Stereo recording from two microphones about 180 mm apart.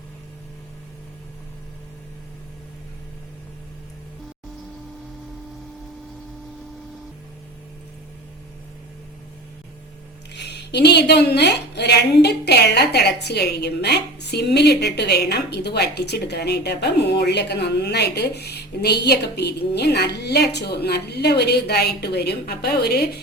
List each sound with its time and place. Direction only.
10.3 s a woman's voice: 65° left (ahead or behind)